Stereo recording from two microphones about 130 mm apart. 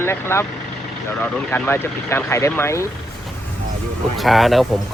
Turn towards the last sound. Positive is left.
turn(degrees=0)  # may be behind; listen again after turning